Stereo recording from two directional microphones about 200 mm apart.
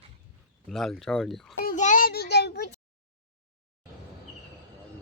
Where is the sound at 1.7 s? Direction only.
40° left (ahead or behind); by 2.7 s 55° left (ahead or behind).